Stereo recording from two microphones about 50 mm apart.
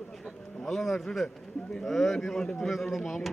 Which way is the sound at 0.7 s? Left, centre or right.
Centre.